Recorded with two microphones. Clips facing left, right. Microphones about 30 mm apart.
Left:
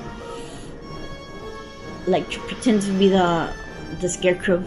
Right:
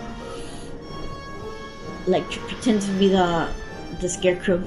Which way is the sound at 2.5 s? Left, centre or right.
Left.